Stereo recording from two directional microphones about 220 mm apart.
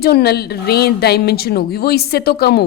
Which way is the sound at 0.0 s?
45° left (ahead or behind).